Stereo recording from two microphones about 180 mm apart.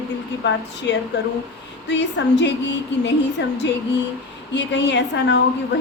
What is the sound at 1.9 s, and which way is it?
A woman's voice, 80° left.